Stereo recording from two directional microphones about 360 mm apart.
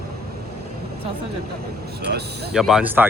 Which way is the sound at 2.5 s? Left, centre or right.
Centre.